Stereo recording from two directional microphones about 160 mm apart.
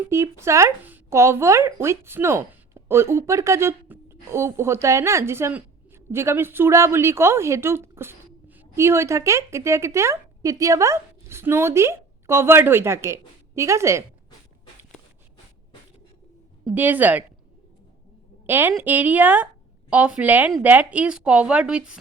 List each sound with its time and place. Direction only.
0.1 s speech: 15° right (ahead or behind)
16.7 s speech: 10° right (ahead or behind)
18.4 s a woman's voice: 10° right (ahead or behind)